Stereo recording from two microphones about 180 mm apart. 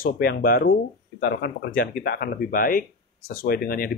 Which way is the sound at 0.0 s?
55° left (ahead or behind).